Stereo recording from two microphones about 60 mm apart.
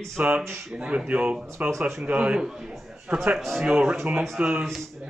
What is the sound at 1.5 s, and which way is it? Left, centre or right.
Speech, right.